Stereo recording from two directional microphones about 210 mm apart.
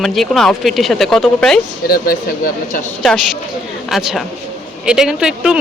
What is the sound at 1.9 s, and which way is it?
Speech, 45° left (ahead or behind).